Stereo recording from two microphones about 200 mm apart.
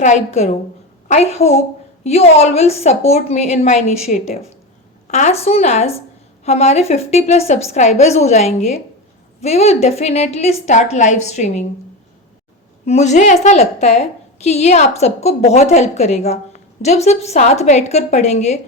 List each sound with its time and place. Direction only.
0.0 s a woman's voice: 35° left (ahead or behind)
12.8 s a woman's voice: 35° left (ahead or behind)